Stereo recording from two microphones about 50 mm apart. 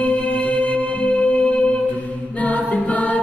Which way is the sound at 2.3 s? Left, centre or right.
Left.